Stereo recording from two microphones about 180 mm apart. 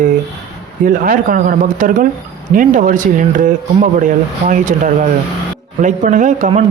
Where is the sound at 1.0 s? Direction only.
50° right (ahead or behind).